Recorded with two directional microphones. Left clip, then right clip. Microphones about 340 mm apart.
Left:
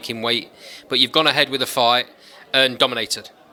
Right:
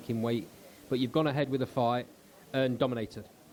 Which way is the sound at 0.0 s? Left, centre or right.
Centre.